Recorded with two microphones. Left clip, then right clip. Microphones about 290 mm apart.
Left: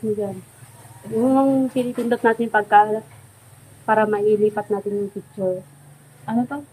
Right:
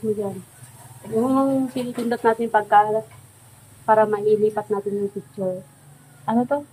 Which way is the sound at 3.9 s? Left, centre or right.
Centre.